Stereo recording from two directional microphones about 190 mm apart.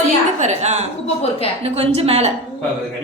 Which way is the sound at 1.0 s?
35° left (ahead or behind).